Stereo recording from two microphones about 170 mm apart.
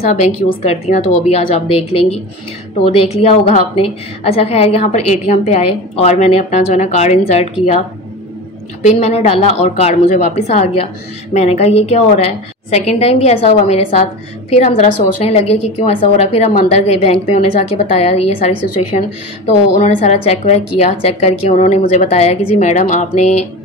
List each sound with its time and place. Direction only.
0.1 s a woman's voice: 45° left (ahead or behind)
8.8 s a woman's voice: 40° left (ahead or behind)